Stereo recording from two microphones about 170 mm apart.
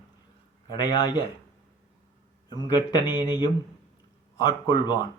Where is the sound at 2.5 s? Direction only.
25° left (ahead or behind).